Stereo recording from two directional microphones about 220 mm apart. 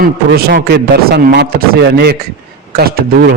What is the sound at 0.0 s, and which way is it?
A man's voice, 45° right (ahead or behind).